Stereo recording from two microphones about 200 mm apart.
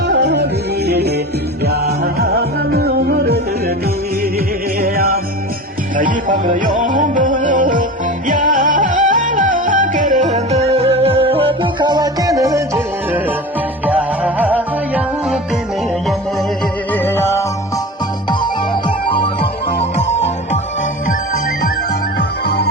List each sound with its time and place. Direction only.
0.1 s music: 60° right (ahead or behind)
4.8 s music: 45° right (ahead or behind)
6.2 s music: 35° right (ahead or behind); by 12.8 s 15° right (ahead or behind)
13.8 s music: 5° right (ahead or behind)
16.9 s music: 10° left (ahead or behind)
18.3 s music: 25° left (ahead or behind)